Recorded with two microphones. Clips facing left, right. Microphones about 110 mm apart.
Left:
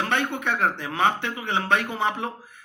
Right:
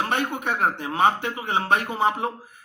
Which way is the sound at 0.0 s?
40° right (ahead or behind).